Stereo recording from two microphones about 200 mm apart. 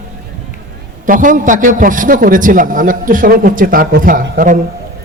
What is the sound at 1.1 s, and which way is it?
A man's voice, 40° right (ahead or behind).